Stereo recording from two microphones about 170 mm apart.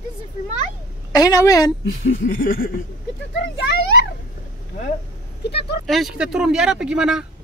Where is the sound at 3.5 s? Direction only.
90° left.